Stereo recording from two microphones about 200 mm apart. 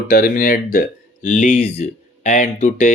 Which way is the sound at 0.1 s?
45° left (ahead or behind).